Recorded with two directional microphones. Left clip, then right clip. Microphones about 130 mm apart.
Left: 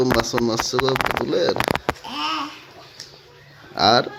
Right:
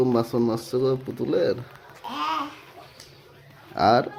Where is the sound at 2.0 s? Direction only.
20° right (ahead or behind).